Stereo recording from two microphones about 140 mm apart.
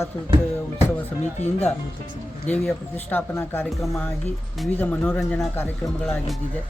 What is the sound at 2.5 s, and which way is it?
Speech, 15° left (ahead or behind).